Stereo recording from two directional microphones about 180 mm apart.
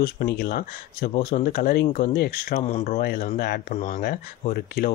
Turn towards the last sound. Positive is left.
turn(degrees=55)  # may be behind; listen again after turning